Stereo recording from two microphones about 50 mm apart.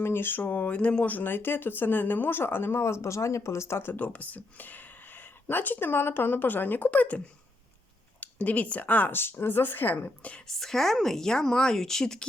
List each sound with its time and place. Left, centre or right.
0.0 s speech: left
1.1 s speech: left
2.8 s speech: left
3.9 s speech: left
8.2 s speech: left
9.1 s speech: left
10.4 s speech: centre